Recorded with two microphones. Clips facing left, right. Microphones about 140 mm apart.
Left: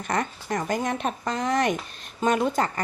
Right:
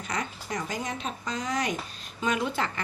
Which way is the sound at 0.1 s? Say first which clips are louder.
Left 6 dB; 50° left (ahead or behind).